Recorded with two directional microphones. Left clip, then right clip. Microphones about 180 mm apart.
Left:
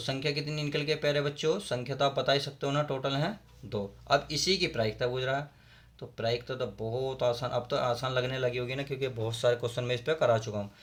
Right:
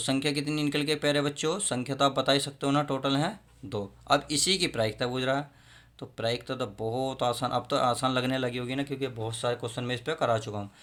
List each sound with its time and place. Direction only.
0.0 s speech: 35° right (ahead or behind)